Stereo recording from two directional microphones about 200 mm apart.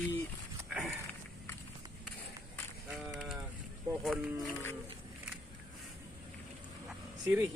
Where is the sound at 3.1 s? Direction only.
5° right (ahead or behind).